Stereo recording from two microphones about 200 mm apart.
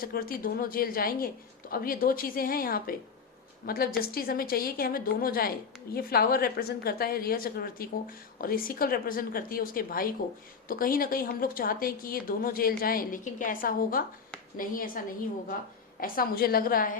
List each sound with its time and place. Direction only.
0.0 s a woman's voice: 45° left (ahead or behind)